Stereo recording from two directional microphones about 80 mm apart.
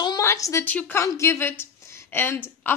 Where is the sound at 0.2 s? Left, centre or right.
Left.